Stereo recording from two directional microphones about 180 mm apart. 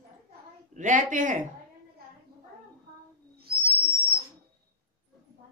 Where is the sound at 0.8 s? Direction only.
45° right (ahead or behind).